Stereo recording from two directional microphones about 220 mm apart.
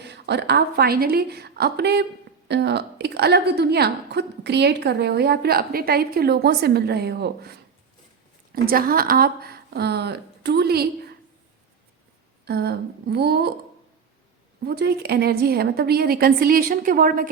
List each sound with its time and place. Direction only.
0.0 s a woman's voice: 50° right (ahead or behind)
12.5 s a woman's voice: 45° right (ahead or behind)
14.6 s a woman's voice: 45° right (ahead or behind)